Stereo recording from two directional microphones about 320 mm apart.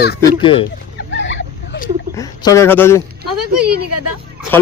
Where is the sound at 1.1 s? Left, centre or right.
Left.